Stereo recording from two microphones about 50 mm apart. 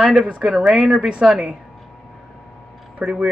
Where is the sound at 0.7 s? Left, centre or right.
Centre.